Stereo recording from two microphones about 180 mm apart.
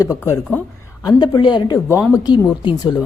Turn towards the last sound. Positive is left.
turn(degrees=25)  # may be behind; listen again after turning